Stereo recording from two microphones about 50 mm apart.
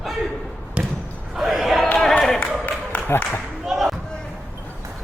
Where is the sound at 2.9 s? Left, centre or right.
Left.